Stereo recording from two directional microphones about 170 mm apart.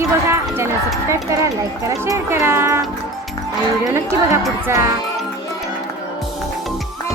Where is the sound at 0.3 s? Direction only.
15° right (ahead or behind).